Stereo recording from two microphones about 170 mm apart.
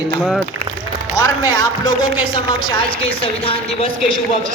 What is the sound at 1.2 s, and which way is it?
Speech, 20° left (ahead or behind).